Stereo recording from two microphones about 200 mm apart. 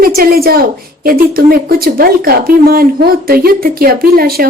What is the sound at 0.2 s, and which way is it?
Speech, 50° right (ahead or behind).